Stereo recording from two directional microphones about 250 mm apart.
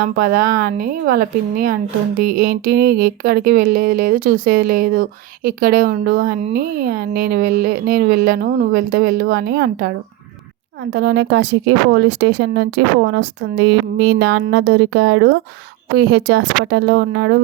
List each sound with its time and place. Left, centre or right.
0.0 s speech: right
11.0 s speech: right